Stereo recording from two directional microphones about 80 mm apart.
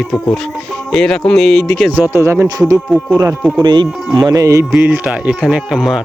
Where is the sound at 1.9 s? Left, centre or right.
Right.